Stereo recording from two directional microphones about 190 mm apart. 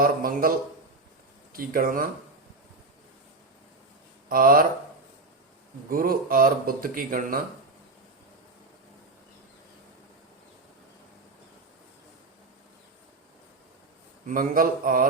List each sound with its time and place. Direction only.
0.0 s speech: 50° right (ahead or behind)
1.5 s speech: 50° right (ahead or behind)
4.3 s speech: 50° right (ahead or behind)
5.9 s speech: 50° right (ahead or behind)
14.3 s speech: 50° right (ahead or behind)